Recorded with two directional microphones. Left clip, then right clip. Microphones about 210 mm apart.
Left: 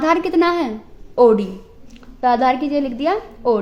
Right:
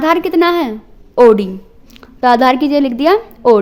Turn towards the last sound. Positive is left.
turn(degrees=-45)  # may be behind; listen again after turning